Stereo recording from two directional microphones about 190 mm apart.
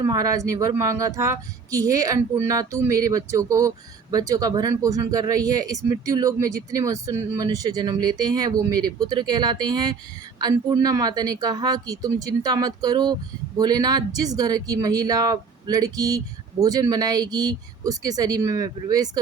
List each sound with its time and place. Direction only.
0.0 s speech: 20° right (ahead or behind)